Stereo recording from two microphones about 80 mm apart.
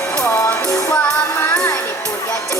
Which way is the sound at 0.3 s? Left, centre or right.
Left.